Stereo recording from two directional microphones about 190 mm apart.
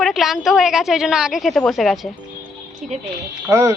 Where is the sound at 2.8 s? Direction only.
40° right (ahead or behind).